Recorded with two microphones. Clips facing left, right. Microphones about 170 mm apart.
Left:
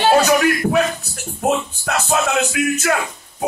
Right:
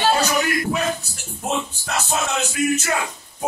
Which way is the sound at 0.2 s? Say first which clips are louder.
Left 6 dB; 65° left (ahead or behind).